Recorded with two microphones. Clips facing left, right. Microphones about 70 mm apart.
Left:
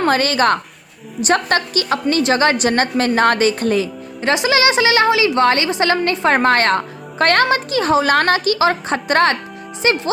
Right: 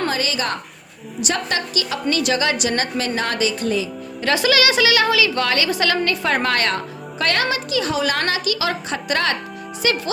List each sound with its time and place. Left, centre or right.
0.1 s a woman's voice: left
4.2 s a woman's voice: left